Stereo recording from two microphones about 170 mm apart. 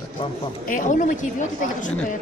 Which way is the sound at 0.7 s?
50° left (ahead or behind).